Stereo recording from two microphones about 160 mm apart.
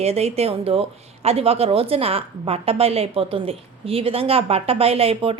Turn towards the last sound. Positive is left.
turn(degrees=-35)  # may be behind; listen again after turning